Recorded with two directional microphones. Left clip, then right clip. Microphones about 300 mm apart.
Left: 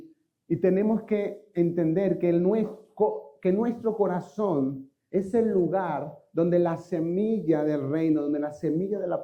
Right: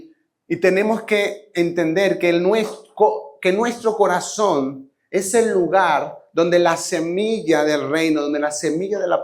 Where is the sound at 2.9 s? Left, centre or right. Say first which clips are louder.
Right 9 dB; right.